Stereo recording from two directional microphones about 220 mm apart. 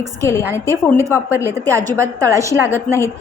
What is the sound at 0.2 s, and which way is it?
A woman's voice, 15° left (ahead or behind).